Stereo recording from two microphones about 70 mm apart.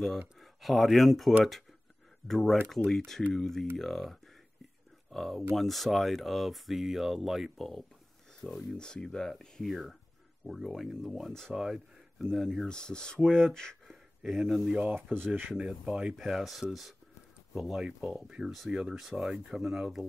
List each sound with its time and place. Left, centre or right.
0.4 s speech: centre
13.8 s a sound: centre
14.7 s speech: centre
15.0 s speech: right
15.8 s speech: centre